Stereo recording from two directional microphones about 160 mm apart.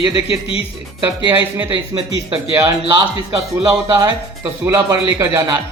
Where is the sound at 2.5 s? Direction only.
25° right (ahead or behind).